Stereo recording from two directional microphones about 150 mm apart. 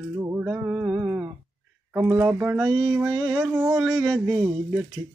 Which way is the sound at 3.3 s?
15° right (ahead or behind).